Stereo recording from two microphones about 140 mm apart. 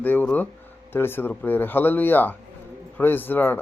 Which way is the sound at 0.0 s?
15° left (ahead or behind).